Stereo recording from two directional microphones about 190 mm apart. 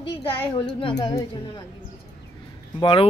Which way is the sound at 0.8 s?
25° left (ahead or behind).